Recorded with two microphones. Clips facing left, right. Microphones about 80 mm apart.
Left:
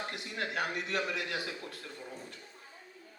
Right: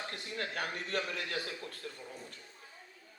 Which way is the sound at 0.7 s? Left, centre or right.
Right.